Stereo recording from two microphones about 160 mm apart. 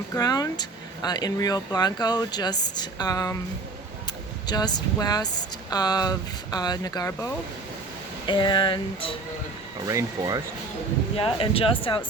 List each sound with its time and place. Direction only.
0.1 s speech: 25° left (ahead or behind)
8.3 s speech: 30° left (ahead or behind)
9.8 s speech: 20° right (ahead or behind)
11.2 s speech: 35° left (ahead or behind)